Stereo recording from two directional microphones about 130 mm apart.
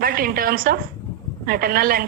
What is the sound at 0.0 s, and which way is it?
Speech, 90° right.